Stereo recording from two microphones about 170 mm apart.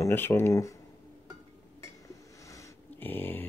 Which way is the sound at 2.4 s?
15° left (ahead or behind).